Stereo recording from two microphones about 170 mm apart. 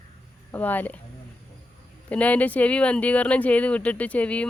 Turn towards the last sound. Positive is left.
turn(degrees=10)  # may be behind; listen again after turning